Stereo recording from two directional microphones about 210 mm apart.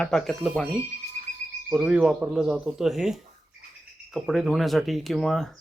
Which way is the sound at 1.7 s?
5° right (ahead or behind).